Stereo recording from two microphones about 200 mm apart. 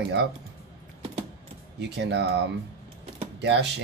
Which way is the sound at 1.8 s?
60° right (ahead or behind).